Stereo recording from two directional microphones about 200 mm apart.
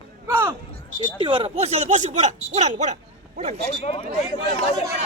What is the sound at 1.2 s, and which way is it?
Speech, 25° right (ahead or behind).